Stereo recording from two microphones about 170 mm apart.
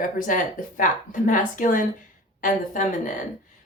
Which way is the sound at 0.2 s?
50° left (ahead or behind).